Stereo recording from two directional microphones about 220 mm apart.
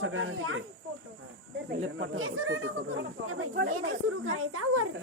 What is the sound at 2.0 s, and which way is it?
Speech, 70° right (ahead or behind).